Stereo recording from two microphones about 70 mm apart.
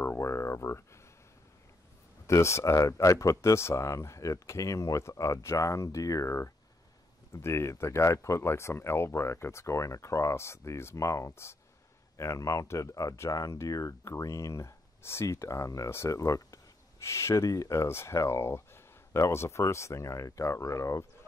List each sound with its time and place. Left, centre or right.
0.2 s a sound: left
2.2 s speech: left
17.0 s speech: left